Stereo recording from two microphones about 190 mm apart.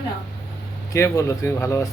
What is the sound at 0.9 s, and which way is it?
Speech, 15° left (ahead or behind).